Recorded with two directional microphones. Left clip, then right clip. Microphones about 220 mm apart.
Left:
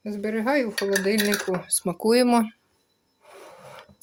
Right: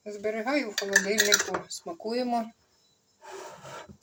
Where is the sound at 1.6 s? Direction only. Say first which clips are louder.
Left 11 dB; 55° left (ahead or behind).